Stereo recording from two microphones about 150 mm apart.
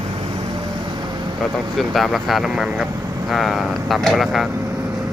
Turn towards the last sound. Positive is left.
turn(degrees=0)  # may be behind; listen again after turning